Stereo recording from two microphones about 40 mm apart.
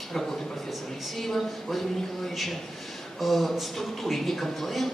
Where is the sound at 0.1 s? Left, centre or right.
Centre.